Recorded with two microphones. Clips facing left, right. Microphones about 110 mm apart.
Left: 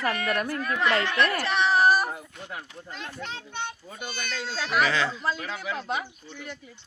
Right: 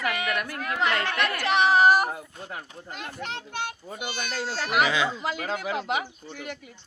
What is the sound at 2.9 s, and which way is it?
Speech, 10° right (ahead or behind).